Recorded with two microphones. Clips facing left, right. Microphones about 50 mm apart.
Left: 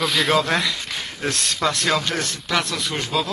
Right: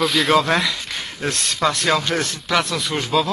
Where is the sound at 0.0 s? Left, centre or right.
Centre.